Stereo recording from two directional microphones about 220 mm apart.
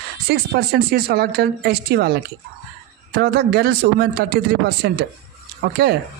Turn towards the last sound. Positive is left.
turn(degrees=-45)  # may be behind; listen again after turning